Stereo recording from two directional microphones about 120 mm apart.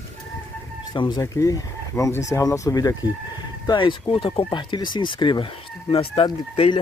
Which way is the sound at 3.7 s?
45° left (ahead or behind).